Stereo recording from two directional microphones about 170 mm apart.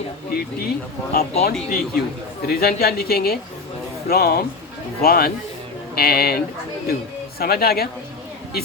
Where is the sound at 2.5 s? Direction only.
65° left (ahead or behind).